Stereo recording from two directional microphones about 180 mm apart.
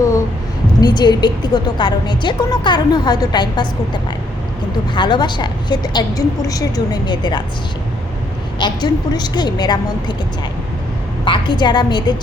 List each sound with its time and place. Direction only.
0.8 s a woman's voice: 25° left (ahead or behind)
4.9 s a woman's voice: 25° left (ahead or behind)
8.5 s a woman's voice: 25° left (ahead or behind)
11.3 s a woman's voice: 25° left (ahead or behind)